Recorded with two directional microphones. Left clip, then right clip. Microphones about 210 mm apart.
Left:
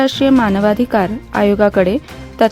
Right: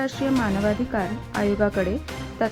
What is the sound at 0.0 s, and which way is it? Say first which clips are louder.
Speech: left 11 dB; 45° left (ahead or behind).